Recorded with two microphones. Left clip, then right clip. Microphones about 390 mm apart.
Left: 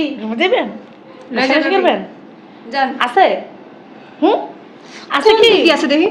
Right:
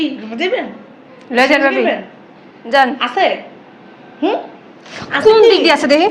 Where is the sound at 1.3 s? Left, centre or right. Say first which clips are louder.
Right 3 dB; right.